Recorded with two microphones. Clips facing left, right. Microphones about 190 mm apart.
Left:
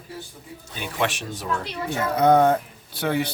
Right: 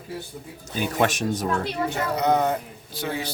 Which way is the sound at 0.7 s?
45° right (ahead or behind).